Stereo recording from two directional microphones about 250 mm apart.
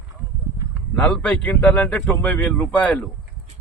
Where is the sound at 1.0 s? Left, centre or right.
Centre.